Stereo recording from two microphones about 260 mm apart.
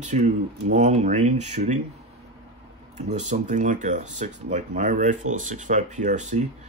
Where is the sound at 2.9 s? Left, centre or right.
Right.